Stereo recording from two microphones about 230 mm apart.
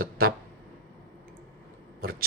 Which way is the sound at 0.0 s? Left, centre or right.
Right.